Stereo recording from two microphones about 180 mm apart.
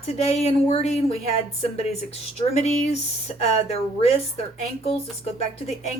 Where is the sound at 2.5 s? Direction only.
40° left (ahead or behind).